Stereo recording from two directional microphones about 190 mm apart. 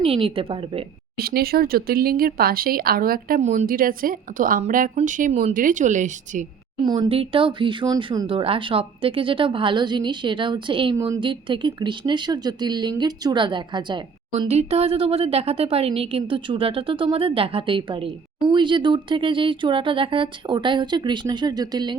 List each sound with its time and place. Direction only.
0.0 s a woman's voice: 30° right (ahead or behind)
1.1 s a woman's voice: 55° right (ahead or behind)
6.8 s a woman's voice: 25° right (ahead or behind)